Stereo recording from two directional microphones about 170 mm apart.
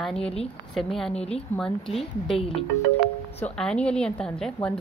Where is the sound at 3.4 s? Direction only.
5° left (ahead or behind).